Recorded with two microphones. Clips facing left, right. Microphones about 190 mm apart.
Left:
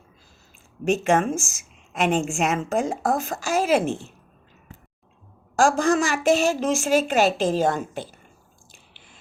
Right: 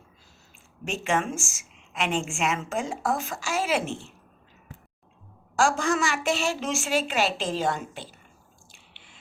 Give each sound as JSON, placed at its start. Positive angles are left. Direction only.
{"t": 0.9, "sound": "a woman's voice", "side_deg": 45}
{"t": 5.5, "sound": "a woman's voice", "side_deg": 40}
{"t": 8.7, "sound": "drip", "side_deg": 45}